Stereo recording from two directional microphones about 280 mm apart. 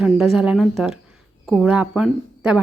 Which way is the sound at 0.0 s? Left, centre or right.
Centre.